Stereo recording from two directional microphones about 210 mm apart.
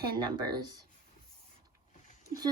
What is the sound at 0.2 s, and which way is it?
Speech, 20° right (ahead or behind).